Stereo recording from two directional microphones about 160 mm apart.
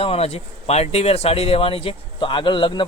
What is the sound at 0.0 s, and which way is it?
Speech, 40° left (ahead or behind).